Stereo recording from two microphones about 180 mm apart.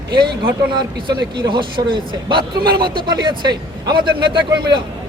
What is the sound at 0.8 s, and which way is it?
A man's voice, 25° right (ahead or behind).